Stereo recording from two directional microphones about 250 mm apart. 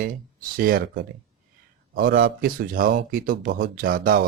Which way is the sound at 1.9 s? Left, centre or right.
Right.